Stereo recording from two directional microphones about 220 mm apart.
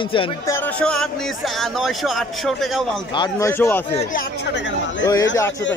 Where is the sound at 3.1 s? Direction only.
15° left (ahead or behind).